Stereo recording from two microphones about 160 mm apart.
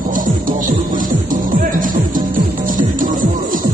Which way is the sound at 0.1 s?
55° right (ahead or behind).